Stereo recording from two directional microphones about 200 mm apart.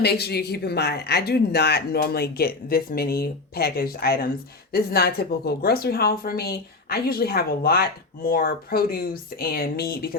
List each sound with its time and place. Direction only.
0.0 s speech: 55° left (ahead or behind)